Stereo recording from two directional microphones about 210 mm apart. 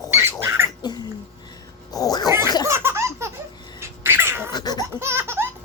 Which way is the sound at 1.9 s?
20° left (ahead or behind).